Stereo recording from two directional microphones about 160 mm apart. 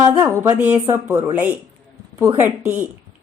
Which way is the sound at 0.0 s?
15° right (ahead or behind).